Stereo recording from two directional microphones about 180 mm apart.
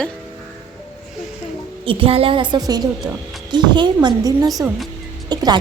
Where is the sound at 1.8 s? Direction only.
30° right (ahead or behind).